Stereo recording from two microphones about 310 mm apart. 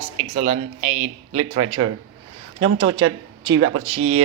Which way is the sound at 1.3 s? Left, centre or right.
Right.